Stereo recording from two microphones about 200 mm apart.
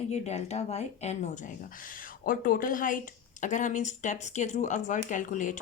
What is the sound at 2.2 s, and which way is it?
A woman's voice, 45° left (ahead or behind).